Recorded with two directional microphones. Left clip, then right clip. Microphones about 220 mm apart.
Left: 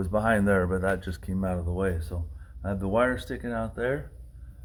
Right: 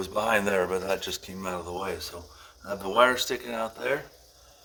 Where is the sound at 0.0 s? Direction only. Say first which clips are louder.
Even; 20° right (ahead or behind).